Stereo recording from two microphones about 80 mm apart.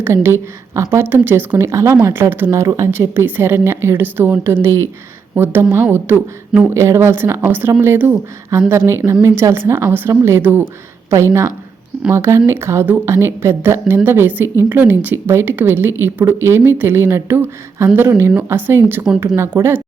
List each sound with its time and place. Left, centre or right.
0.0 s a woman's voice: right
11.1 s a woman's voice: right